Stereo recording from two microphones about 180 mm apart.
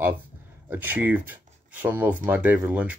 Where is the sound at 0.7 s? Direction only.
10° right (ahead or behind).